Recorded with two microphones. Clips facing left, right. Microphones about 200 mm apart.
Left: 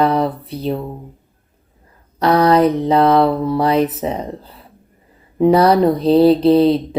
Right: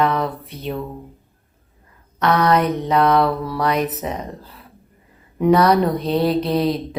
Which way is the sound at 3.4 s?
25° left (ahead or behind).